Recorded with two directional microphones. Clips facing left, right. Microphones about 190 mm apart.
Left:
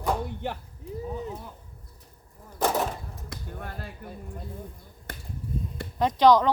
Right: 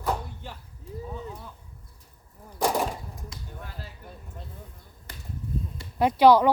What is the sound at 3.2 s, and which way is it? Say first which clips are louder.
Speech: left 4 dB; 55° left (ahead or behind).